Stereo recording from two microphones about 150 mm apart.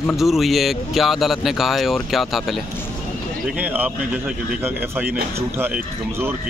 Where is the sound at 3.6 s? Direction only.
10° right (ahead or behind).